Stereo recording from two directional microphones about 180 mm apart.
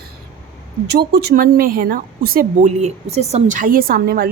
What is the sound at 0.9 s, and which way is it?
A woman's voice, 60° right (ahead or behind).